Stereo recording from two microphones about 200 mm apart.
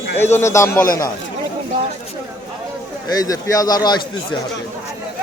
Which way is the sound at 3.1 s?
20° left (ahead or behind).